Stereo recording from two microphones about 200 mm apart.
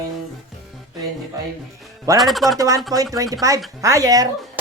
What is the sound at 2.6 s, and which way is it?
Speech, 15° right (ahead or behind).